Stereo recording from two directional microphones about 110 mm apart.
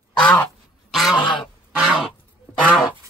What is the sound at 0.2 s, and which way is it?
Quack, 15° left (ahead or behind).